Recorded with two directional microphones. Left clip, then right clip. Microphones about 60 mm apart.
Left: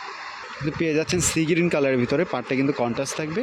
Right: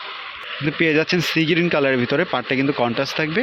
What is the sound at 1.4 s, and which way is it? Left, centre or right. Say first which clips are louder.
Speech: right 2 dB; left.